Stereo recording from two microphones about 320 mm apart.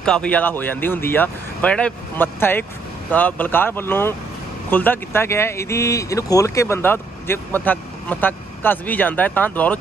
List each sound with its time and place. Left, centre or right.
0.0 s speech: centre